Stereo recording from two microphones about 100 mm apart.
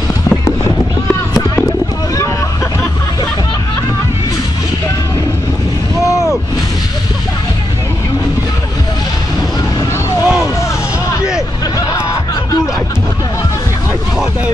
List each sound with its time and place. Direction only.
6.0 s artillery fire: 30° left (ahead or behind)
10.2 s vehicle: 10° right (ahead or behind)